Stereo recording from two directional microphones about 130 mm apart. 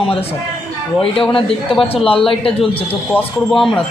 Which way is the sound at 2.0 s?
45° left (ahead or behind).